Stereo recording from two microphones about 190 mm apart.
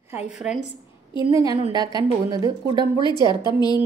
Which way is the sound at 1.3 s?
20° right (ahead or behind).